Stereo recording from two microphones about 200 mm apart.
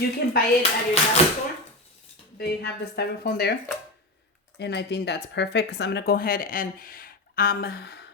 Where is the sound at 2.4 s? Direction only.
55° left (ahead or behind).